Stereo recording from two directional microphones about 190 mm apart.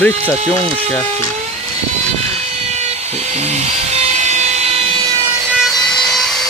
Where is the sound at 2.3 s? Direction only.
35° right (ahead or behind).